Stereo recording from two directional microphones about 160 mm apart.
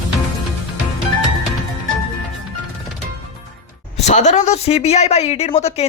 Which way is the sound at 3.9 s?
45° left (ahead or behind).